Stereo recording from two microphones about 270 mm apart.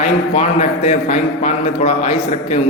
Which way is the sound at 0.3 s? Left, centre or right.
Left.